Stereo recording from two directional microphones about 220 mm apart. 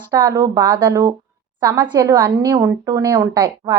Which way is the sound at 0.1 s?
15° right (ahead or behind).